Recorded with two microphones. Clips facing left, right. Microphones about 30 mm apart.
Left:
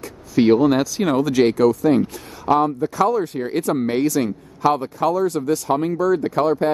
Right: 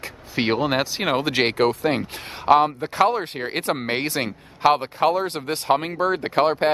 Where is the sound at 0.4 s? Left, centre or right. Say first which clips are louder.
Left 6 dB; right.